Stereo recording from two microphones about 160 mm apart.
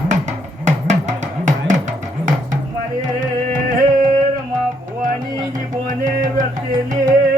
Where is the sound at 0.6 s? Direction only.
50° right (ahead or behind).